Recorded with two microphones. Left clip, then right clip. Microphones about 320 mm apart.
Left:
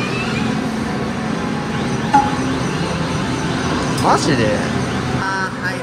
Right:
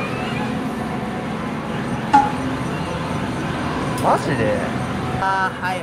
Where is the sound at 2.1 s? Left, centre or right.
Centre.